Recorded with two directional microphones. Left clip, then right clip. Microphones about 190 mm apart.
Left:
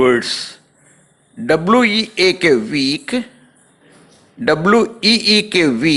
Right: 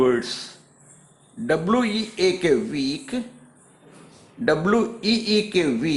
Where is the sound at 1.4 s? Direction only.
25° left (ahead or behind).